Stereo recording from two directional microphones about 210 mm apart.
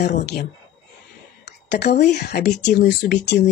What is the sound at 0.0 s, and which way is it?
Speech, 50° left (ahead or behind).